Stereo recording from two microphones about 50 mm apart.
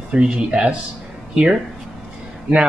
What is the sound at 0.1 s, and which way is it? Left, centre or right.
Speech, right.